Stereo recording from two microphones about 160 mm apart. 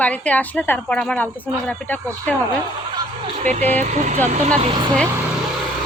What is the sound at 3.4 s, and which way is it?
Speech, 45° right (ahead or behind).